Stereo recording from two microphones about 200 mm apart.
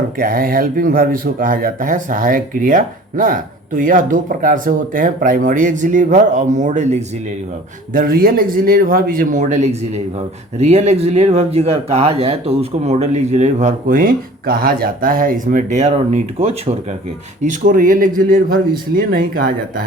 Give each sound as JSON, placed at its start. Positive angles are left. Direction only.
{"t": 0.2, "sound": "speech", "side_deg": -45}
{"t": 7.9, "sound": "speech", "side_deg": -45}